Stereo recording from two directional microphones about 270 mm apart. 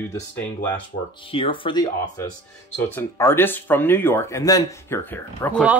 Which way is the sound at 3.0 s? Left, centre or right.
Centre.